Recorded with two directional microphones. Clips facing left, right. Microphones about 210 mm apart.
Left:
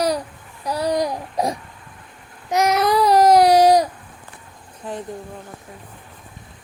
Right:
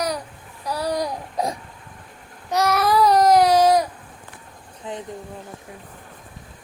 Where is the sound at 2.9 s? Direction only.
25° left (ahead or behind).